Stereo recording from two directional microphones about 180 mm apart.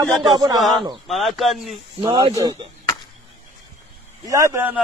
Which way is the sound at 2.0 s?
25° right (ahead or behind).